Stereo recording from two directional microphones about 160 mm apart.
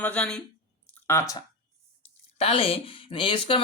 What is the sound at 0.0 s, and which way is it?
Speech, 5° left (ahead or behind).